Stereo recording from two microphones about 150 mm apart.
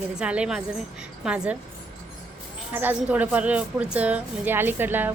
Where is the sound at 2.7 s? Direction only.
10° right (ahead or behind).